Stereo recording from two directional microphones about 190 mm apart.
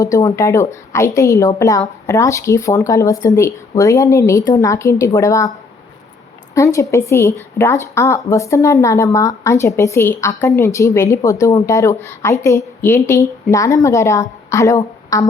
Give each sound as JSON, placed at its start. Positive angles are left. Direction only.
{"t": 0.0, "sound": "speech", "side_deg": 15}
{"t": 6.5, "sound": "speech", "side_deg": 15}